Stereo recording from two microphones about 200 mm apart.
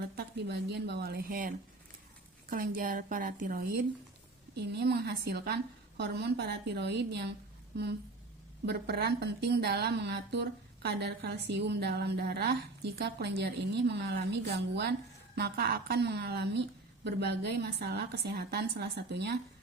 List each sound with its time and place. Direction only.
0.2 s a woman's voice: 55° right (ahead or behind)
4.5 s a woman's voice: 55° right (ahead or behind)
8.6 s a woman's voice: 55° right (ahead or behind)